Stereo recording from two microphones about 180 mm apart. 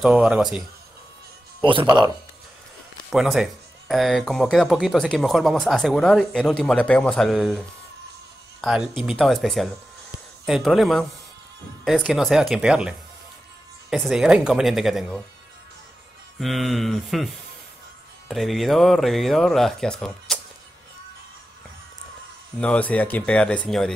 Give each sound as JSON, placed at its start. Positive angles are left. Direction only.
{"t": 0.0, "sound": "speech", "side_deg": -5}
{"t": 1.6, "sound": "speech", "side_deg": -30}
{"t": 3.1, "sound": "speech", "side_deg": 0}
{"t": 16.3, "sound": "speech", "side_deg": 0}
{"t": 22.6, "sound": "speech", "side_deg": 5}